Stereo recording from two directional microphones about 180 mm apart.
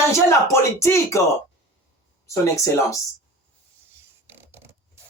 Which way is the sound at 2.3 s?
15° left (ahead or behind).